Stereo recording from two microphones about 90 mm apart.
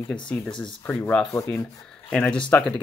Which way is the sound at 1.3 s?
30° left (ahead or behind).